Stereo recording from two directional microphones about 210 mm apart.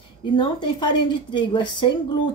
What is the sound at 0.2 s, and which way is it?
A woman's voice, 20° left (ahead or behind).